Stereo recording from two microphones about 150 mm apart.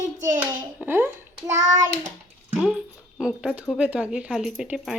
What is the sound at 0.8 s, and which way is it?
Speech, 15° right (ahead or behind).